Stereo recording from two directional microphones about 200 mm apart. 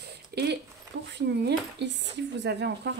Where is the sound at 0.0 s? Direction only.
55° right (ahead or behind).